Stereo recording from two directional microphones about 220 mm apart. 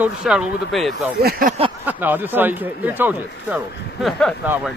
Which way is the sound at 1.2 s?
45° right (ahead or behind).